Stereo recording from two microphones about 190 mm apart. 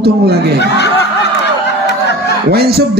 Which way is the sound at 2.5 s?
55° right (ahead or behind).